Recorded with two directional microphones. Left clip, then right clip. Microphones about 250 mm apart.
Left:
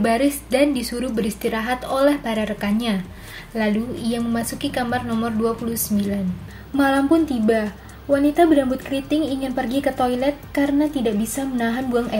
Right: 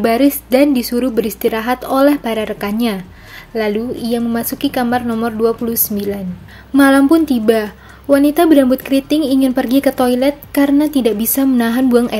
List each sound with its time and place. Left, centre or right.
0.0 s a woman's voice: right